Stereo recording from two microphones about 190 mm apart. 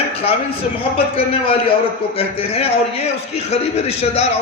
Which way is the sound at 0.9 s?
30° left (ahead or behind).